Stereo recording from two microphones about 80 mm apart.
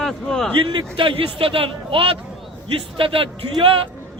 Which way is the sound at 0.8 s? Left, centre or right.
Right.